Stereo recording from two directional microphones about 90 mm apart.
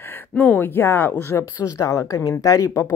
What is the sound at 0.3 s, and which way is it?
Speech, 15° left (ahead or behind).